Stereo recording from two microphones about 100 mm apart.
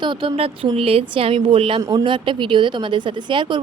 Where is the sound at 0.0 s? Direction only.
60° right (ahead or behind).